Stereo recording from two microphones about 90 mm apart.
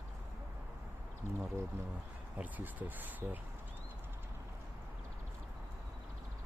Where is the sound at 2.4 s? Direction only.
20° right (ahead or behind).